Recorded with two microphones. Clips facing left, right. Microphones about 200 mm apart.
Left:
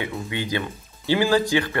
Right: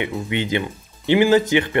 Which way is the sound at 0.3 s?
20° right (ahead or behind).